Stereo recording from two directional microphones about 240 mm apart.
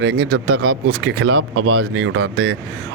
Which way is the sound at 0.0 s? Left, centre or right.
Right.